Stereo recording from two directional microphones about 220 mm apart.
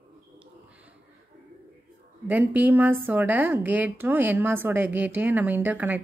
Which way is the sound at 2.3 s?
10° right (ahead or behind).